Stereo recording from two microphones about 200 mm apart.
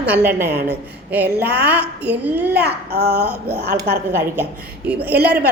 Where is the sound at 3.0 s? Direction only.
10° right (ahead or behind).